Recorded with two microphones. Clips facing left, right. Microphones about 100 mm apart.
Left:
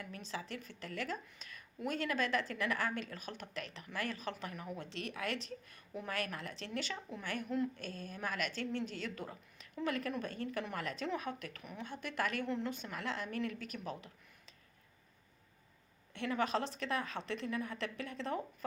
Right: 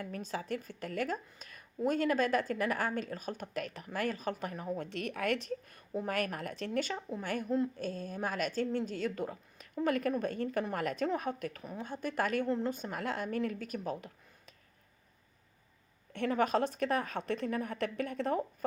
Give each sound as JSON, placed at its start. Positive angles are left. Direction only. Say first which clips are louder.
{"t": 0.0, "sound": "a woman's voice", "louder": "right 5 dB", "side_deg": -45}
{"t": 4.8, "sound": "a woman's voice", "louder": "right 4 dB", "side_deg": -50}
{"t": 16.1, "sound": "a woman's voice", "louder": "right 5 dB", "side_deg": -45}